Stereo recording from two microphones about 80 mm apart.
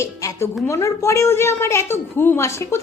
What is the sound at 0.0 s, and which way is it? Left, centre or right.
Music, left.